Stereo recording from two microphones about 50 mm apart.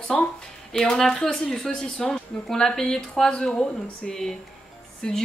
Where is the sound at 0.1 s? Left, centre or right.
Centre.